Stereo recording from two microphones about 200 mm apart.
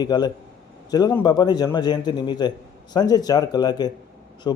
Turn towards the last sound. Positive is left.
turn(degrees=20)  # may be behind; listen again after turning